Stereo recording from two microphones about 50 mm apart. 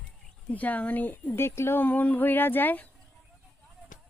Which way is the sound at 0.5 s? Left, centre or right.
Left.